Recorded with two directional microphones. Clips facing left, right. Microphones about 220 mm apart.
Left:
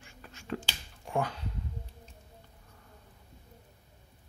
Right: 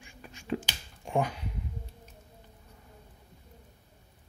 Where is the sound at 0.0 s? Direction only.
15° right (ahead or behind).